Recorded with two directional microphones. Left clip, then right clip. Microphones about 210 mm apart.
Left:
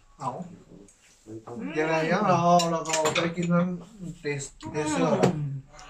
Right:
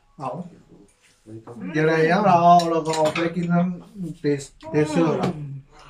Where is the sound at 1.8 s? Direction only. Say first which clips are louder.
Right 6 dB; 50° right (ahead or behind).